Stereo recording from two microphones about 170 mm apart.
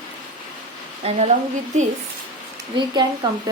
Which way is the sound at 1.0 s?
40° right (ahead or behind).